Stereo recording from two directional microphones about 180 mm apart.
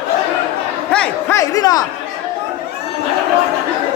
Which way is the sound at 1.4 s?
20° left (ahead or behind).